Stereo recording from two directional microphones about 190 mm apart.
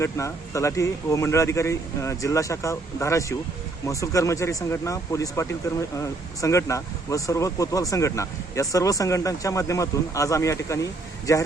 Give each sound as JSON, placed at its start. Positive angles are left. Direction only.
{"t": 0.0, "sound": "speech", "side_deg": 15}